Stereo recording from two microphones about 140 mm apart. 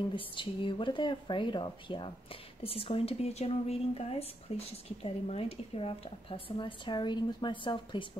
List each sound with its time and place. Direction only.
0.1 s speech: 35° left (ahead or behind)